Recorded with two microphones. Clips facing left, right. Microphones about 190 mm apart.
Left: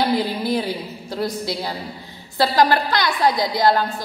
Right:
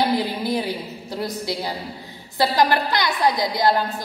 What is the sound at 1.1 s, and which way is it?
Speech, 20° right (ahead or behind).